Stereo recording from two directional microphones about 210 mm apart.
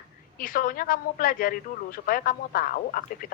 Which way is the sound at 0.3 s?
40° left (ahead or behind).